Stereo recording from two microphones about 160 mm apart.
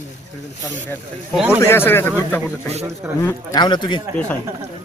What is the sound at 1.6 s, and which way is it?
Speech, 15° left (ahead or behind).